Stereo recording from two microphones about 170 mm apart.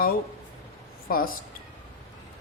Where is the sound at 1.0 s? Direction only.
60° left (ahead or behind).